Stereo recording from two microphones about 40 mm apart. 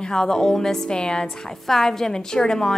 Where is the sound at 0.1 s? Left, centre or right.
Centre.